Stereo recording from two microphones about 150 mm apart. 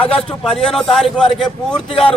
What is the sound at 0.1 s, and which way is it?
A man's voice, 5° left (ahead or behind).